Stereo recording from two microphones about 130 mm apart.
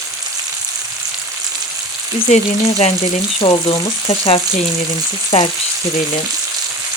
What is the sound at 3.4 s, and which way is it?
Speech, 40° left (ahead or behind).